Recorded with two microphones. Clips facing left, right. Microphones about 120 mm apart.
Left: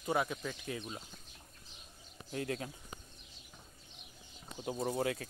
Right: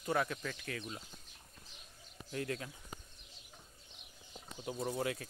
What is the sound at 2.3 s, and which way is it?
Speech, 30° left (ahead or behind).